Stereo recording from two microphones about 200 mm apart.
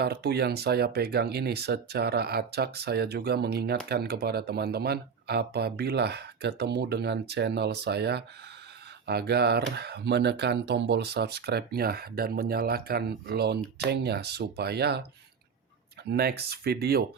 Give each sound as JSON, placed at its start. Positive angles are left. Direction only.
{"t": 0.0, "sound": "speech", "side_deg": -50}
{"t": 16.0, "sound": "speech", "side_deg": -55}